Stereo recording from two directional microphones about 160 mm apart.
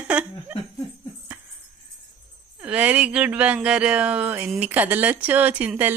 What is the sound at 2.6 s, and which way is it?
Speech, 10° right (ahead or behind).